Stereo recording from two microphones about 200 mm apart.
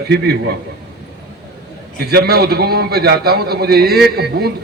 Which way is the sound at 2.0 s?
50° right (ahead or behind).